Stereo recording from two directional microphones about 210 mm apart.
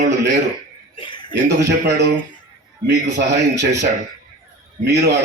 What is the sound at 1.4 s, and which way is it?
A man's voice, 55° right (ahead or behind).